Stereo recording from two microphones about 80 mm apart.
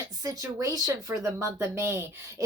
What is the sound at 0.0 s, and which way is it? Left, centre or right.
Speech, right.